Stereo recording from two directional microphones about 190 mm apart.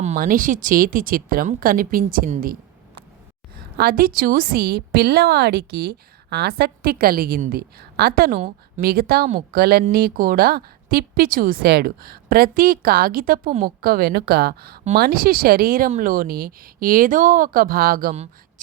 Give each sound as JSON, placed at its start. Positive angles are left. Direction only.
{"t": 0.0, "sound": "a woman's voice", "side_deg": -40}
{"t": 3.8, "sound": "a woman's voice", "side_deg": -50}